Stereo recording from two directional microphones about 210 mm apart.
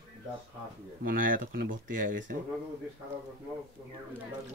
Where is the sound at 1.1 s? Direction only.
40° right (ahead or behind).